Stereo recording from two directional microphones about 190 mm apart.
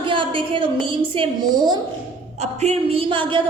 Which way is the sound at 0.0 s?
25° right (ahead or behind).